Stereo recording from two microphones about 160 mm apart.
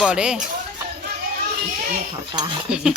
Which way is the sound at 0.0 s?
5° right (ahead or behind).